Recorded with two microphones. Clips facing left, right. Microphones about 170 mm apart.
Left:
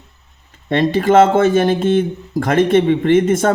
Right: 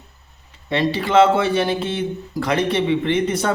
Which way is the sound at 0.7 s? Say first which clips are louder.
Left 5 dB; 50° left (ahead or behind).